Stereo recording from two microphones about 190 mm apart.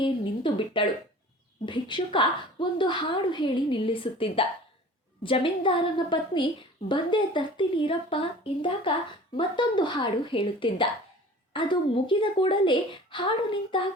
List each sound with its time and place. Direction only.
0.0 s a woman's voice: 25° left (ahead or behind)